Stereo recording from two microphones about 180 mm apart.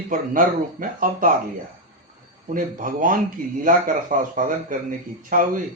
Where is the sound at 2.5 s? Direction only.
50° right (ahead or behind).